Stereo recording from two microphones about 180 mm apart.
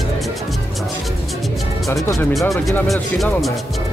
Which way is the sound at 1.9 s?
20° left (ahead or behind).